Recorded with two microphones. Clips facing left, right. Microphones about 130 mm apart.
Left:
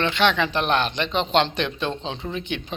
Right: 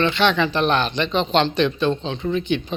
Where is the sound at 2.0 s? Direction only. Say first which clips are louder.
Right 5 dB; 30° left (ahead or behind).